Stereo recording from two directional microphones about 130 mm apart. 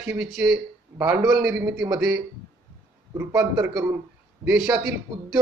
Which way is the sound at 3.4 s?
5° right (ahead or behind).